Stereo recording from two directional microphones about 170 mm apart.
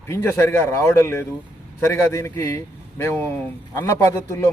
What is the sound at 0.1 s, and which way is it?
Speech, 15° left (ahead or behind).